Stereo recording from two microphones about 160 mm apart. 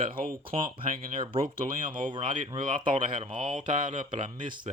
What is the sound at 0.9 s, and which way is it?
Speech, 55° right (ahead or behind).